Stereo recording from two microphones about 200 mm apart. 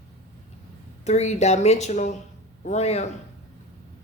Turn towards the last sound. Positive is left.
turn(degrees=35)  # may be behind; listen again after turning